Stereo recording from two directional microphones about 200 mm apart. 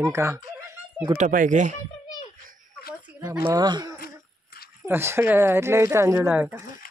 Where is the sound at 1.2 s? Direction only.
40° right (ahead or behind).